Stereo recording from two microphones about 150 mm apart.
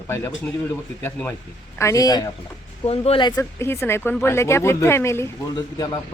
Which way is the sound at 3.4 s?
15° left (ahead or behind).